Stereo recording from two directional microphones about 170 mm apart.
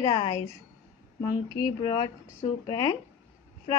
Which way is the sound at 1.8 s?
30° left (ahead or behind).